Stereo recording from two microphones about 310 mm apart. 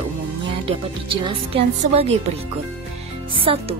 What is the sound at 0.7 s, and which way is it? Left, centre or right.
Music, centre.